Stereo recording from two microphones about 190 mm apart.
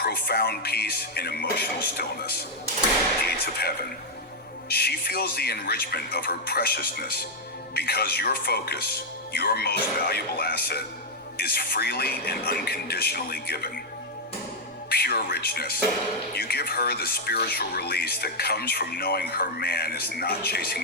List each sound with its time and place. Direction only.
0.0 s speech: 55° left (ahead or behind)
3.4 s speech: 55° left (ahead or behind)
14.8 s speech: 55° left (ahead or behind)